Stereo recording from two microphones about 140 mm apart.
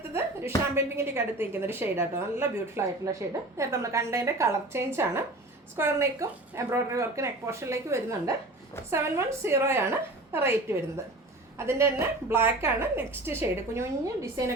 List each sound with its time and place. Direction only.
0.1 s a woman's voice: 15° right (ahead or behind)